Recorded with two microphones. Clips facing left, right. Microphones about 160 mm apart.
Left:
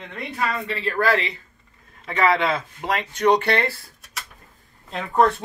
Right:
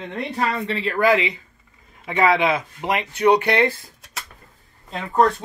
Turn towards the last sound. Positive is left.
turn(degrees=0)  # may be behind; listen again after turning